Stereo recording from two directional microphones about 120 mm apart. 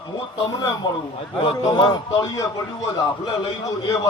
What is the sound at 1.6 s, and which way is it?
Speech, 35° left (ahead or behind).